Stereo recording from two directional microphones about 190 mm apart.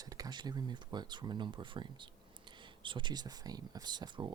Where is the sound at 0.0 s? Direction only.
20° right (ahead or behind).